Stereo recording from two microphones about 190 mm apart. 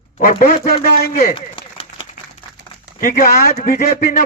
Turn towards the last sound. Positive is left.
turn(degrees=50)  # may be behind; listen again after turning